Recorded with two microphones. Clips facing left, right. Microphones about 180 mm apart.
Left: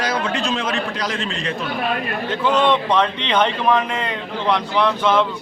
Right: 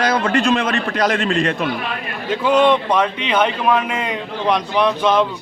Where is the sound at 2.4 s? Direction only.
10° right (ahead or behind).